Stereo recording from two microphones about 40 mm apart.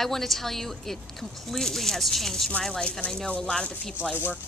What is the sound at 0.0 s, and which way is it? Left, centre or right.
Speech, centre.